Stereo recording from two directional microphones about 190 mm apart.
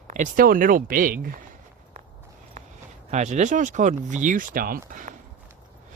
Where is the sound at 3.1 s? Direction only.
35° right (ahead or behind).